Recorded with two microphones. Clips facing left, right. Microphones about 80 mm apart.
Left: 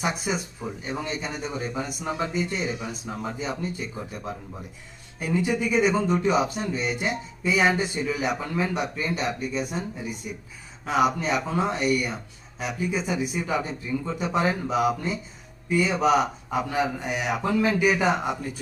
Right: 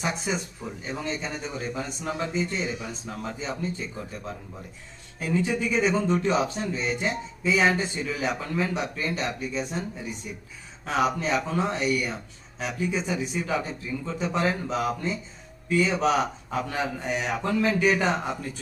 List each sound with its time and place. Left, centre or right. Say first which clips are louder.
0.0 s speech: left 1 dB; centre